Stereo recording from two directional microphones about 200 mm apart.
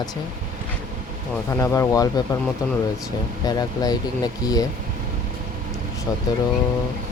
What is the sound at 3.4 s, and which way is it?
Speech, 20° left (ahead or behind).